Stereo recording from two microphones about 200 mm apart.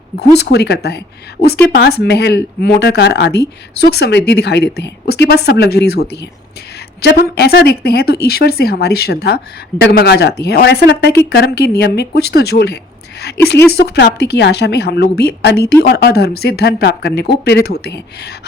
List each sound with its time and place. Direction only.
0.2 s speech: 55° left (ahead or behind)